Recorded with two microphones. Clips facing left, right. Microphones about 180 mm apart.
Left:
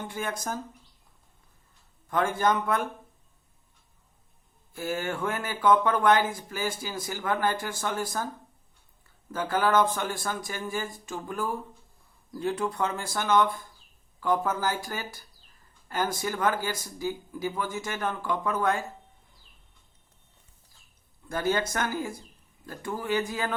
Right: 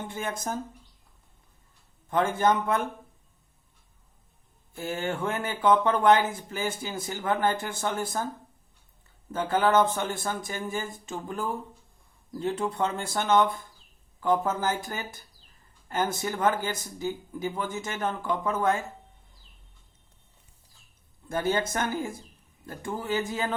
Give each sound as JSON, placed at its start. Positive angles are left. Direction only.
{"t": 0.0, "sound": "speech", "side_deg": -25}
{"t": 2.0, "sound": "speech", "side_deg": -25}
{"t": 4.7, "sound": "speech", "side_deg": -25}
{"t": 9.3, "sound": "speech", "side_deg": -25}
{"t": 21.2, "sound": "speech", "side_deg": -20}